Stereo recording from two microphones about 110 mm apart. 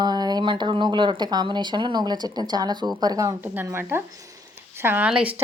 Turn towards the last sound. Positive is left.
turn(degrees=-10)  # may be behind; listen again after turning